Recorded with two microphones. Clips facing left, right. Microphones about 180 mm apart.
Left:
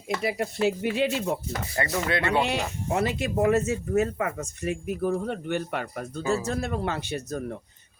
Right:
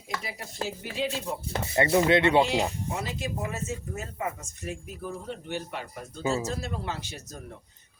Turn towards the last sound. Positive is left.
turn(degrees=60)  # may be behind; listen again after turning